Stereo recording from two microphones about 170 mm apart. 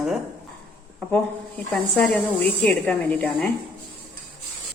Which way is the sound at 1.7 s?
5° left (ahead or behind).